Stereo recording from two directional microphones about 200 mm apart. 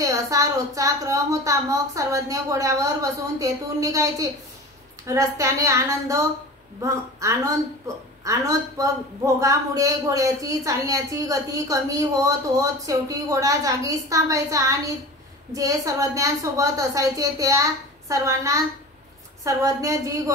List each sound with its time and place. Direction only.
0.0 s a man's voice: 15° right (ahead or behind)